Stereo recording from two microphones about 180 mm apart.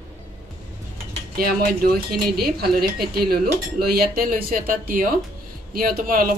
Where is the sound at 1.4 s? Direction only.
55° right (ahead or behind).